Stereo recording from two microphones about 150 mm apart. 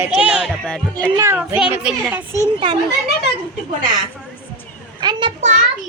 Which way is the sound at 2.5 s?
35° right (ahead or behind).